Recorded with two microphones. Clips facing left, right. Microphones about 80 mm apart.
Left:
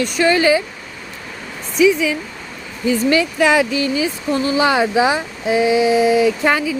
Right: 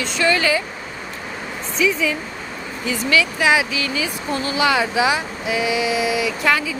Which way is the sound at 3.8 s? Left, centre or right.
Left.